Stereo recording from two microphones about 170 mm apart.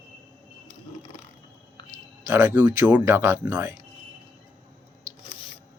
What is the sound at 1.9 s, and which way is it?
Speech, 15° right (ahead or behind).